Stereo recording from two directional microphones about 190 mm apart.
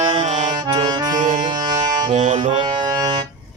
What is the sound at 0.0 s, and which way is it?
Accordion, 35° right (ahead or behind).